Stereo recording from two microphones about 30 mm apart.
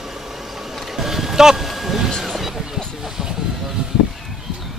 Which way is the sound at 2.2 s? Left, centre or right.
Centre.